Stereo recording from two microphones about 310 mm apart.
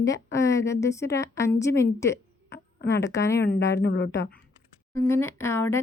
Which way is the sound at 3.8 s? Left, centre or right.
Left.